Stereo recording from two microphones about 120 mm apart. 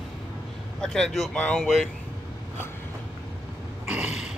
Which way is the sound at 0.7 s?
5° left (ahead or behind).